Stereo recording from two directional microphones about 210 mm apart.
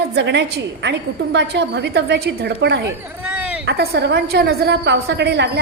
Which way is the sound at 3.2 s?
5° right (ahead or behind).